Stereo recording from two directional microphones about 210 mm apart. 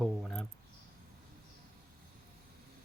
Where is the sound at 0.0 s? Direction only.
Centre (ahead or behind).